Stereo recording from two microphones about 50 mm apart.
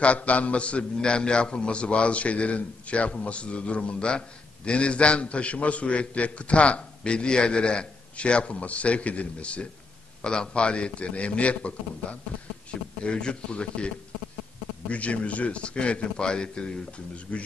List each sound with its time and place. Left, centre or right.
0.0 s a man's voice: left